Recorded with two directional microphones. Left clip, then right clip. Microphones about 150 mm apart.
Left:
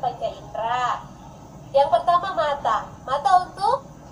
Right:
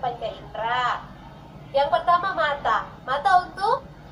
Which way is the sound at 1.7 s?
35° left (ahead or behind).